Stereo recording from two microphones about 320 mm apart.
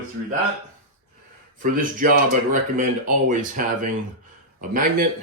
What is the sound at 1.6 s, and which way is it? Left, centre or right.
Speech, right.